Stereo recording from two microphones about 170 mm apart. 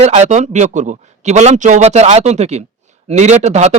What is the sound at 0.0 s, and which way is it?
A man's voice, 40° right (ahead or behind).